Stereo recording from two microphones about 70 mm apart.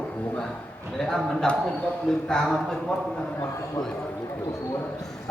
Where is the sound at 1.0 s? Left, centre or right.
Centre.